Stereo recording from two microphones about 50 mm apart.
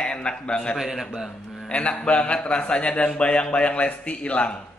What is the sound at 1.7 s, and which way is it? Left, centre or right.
A man's voice, left.